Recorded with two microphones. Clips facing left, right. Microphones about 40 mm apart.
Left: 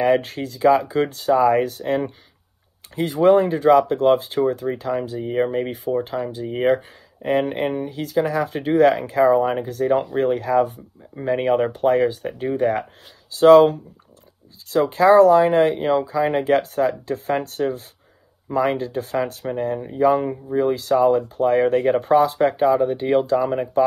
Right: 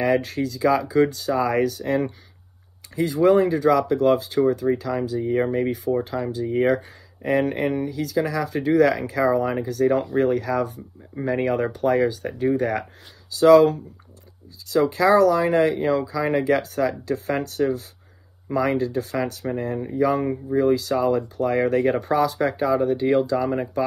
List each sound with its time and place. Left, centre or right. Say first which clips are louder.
0.0 s speech: left 2 dB; left